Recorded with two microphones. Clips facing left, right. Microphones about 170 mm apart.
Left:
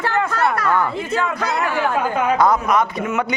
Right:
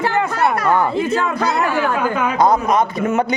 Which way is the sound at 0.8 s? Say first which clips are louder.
Right 3 dB; 35° right (ahead or behind).